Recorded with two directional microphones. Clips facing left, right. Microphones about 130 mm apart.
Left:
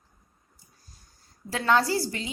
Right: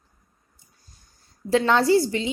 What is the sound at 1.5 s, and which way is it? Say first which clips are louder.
Speech: right 6 dB; 25° right (ahead or behind).